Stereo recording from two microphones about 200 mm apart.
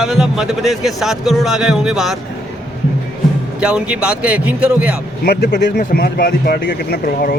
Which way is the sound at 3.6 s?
5° right (ahead or behind).